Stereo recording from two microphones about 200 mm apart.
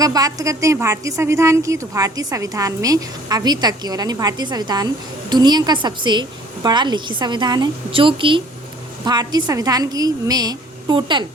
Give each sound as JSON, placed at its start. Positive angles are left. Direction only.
{"t": 0.0, "sound": "a woman's voice", "side_deg": -20}